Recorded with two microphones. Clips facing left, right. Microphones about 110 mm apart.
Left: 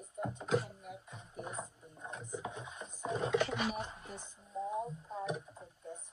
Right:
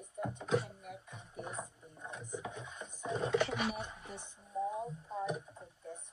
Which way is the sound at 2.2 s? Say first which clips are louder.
Even; 30° left (ahead or behind).